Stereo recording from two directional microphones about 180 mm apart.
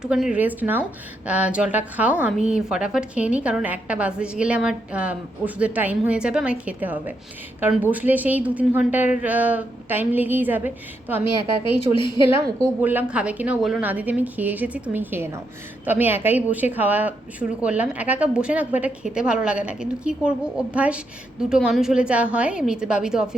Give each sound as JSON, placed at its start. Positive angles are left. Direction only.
{"t": 0.0, "sound": "a woman's voice", "side_deg": -5}
{"t": 11.9, "sound": "a woman's voice", "side_deg": 25}
{"t": 12.8, "sound": "a woman's voice", "side_deg": -10}